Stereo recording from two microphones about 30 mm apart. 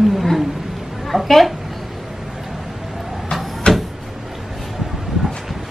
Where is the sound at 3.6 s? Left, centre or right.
Left.